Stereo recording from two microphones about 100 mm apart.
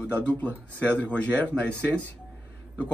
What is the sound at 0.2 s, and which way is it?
Speech, 15° left (ahead or behind).